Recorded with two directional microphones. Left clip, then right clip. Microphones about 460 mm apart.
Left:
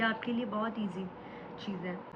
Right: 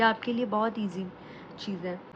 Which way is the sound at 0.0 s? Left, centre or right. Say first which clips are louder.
Right 7 dB; centre.